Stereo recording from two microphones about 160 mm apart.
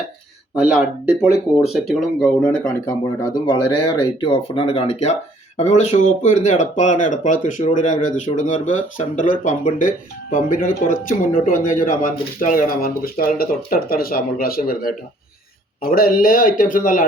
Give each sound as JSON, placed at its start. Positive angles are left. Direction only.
{"t": 0.5, "sound": "speech", "side_deg": -5}
{"t": 2.8, "sound": "speech", "side_deg": 25}